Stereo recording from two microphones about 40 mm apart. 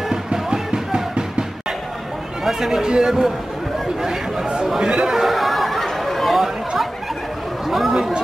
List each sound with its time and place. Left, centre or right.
0.1 s music: centre
2.4 s a man's voice: centre
5.2 s a sound: centre
7.6 s speech: centre